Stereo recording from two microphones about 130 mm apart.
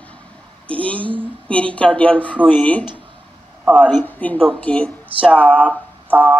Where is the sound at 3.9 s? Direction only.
15° left (ahead or behind).